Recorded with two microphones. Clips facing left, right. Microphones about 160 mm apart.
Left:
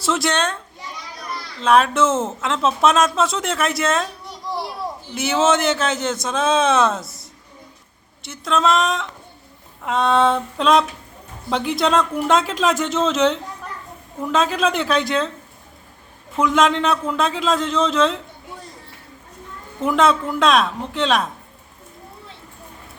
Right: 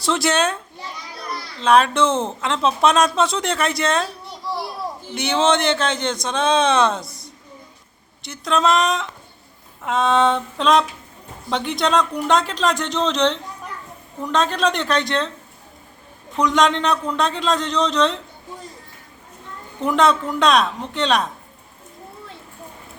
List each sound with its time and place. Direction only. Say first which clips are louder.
0.0 s speech: right 1 dB; centre (ahead or behind)
1.5 s speech: even; centre (ahead or behind)
4.5 s a sound: even; 15° left (ahead or behind)
5.1 s speech: left 1 dB; 5° left (ahead or behind)
16.3 s speech: left 1 dB; 5° left (ahead or behind)
19.8 s speech: even; centre (ahead or behind)